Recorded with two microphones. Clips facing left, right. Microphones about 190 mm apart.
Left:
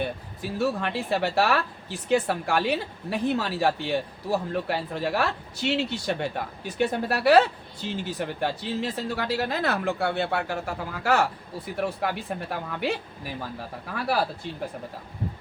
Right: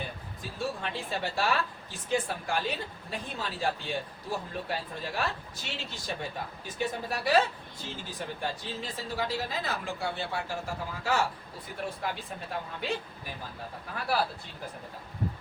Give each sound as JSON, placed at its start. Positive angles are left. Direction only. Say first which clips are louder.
{"t": 0.6, "sound": "speech", "louder": "left 7 dB", "side_deg": 65}